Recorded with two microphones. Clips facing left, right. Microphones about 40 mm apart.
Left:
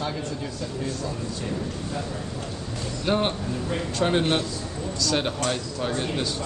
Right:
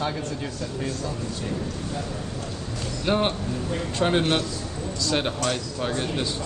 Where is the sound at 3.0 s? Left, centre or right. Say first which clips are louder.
Right 1 dB; centre.